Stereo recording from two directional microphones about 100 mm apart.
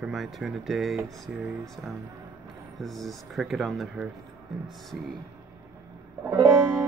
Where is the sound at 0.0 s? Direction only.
Centre (ahead or behind).